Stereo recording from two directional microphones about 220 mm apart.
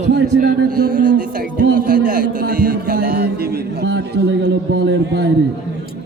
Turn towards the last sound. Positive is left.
turn(degrees=-50)  # may be behind; listen again after turning